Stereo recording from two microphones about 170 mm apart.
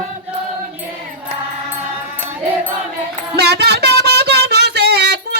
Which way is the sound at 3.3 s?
75° right (ahead or behind).